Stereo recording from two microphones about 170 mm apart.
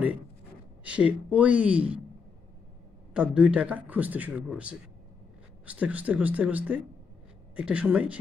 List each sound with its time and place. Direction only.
0.8 s a man's voice: 10° right (ahead or behind)
3.2 s a man's voice: 5° right (ahead or behind)